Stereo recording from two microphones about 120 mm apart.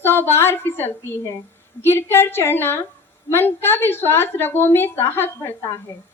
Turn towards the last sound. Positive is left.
turn(degrees=20)  # may be behind; listen again after turning